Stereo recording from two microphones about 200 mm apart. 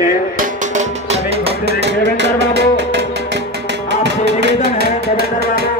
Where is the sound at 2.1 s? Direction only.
60° right (ahead or behind).